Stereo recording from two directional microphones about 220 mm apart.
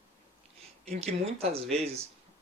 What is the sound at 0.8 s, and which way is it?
Speech, 30° right (ahead or behind).